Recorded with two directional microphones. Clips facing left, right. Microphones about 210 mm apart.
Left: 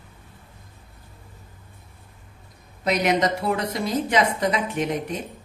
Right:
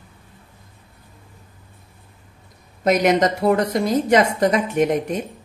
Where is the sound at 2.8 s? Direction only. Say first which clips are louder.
Right 5 dB; 45° right (ahead or behind).